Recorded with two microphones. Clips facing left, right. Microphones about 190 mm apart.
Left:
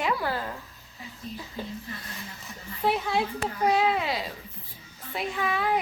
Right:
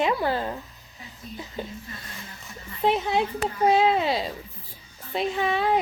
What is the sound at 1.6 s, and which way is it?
Speech, 20° right (ahead or behind).